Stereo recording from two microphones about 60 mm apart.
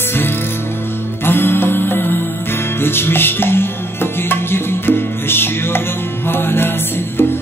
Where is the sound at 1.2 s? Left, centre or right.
Left.